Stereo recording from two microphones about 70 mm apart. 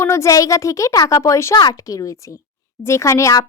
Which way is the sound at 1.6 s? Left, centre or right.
Left.